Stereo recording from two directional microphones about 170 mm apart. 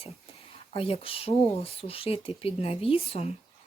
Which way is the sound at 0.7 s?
35° left (ahead or behind).